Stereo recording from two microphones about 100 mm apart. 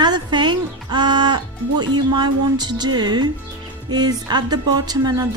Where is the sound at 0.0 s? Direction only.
45° right (ahead or behind).